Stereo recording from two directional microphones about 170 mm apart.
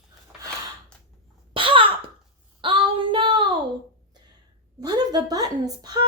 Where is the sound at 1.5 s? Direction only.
30° right (ahead or behind).